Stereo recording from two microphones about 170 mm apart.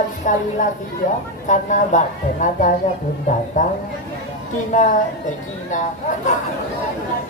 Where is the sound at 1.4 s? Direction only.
45° left (ahead or behind).